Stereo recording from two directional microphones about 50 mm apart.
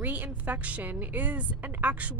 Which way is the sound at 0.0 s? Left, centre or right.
Right.